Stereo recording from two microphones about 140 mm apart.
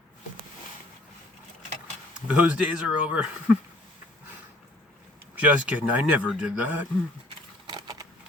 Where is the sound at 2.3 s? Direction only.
10° right (ahead or behind).